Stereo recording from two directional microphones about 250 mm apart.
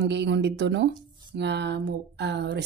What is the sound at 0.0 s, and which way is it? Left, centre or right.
Speech, right.